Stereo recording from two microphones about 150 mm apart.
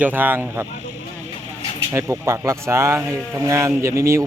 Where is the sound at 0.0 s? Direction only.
15° right (ahead or behind).